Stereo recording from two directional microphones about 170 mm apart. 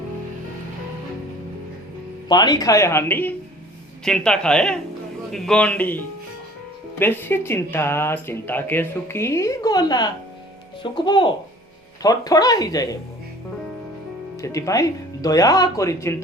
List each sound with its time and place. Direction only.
2.3 s speech: 25° left (ahead or behind)
14.4 s speech: 20° left (ahead or behind)